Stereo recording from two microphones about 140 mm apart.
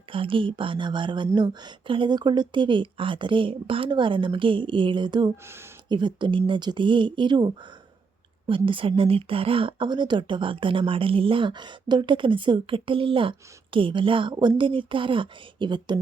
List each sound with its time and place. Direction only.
0.1 s speech: 40° right (ahead or behind)